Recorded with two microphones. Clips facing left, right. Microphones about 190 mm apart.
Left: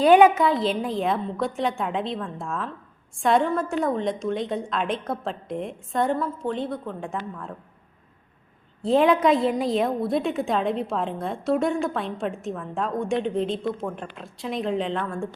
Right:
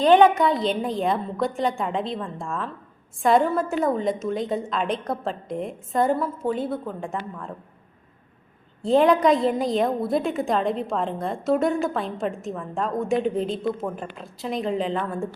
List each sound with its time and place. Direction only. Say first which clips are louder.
0.0 s a woman's voice: even; 10° left (ahead or behind)
8.8 s a woman's voice: right 1 dB; centre (ahead or behind)